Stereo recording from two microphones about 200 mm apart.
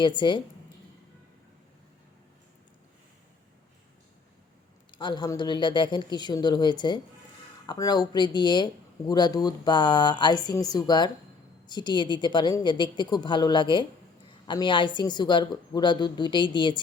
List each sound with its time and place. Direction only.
0.0 s speech: 25° left (ahead or behind)
4.9 s speech: 20° left (ahead or behind)